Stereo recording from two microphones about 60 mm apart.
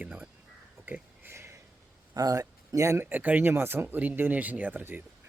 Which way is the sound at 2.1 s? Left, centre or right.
Right.